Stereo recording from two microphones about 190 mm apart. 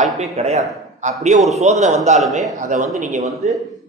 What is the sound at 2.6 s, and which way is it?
Speech, 40° right (ahead or behind).